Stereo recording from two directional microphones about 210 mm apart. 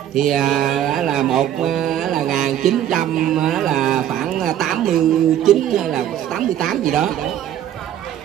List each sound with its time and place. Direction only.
0.2 s mantra: centre (ahead or behind)
2.4 s a sound: centre (ahead or behind)
6.9 s mantra: centre (ahead or behind)